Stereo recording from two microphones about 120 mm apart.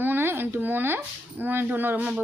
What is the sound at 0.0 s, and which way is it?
A woman's voice, 20° right (ahead or behind).